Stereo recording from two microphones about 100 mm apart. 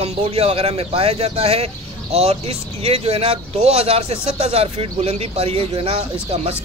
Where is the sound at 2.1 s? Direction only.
90° right; by 6.0 s 70° right (ahead or behind).